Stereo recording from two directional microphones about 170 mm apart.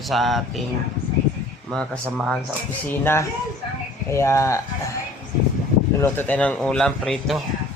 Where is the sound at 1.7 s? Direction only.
5° left (ahead or behind).